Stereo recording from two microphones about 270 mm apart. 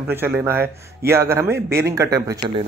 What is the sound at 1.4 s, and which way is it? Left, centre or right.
Speech, right.